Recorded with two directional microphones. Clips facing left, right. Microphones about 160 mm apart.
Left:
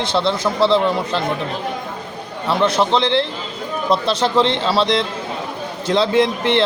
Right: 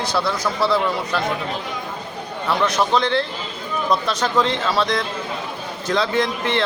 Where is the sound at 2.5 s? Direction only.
25° left (ahead or behind).